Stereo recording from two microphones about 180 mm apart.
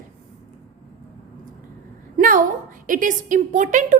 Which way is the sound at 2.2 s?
50° right (ahead or behind).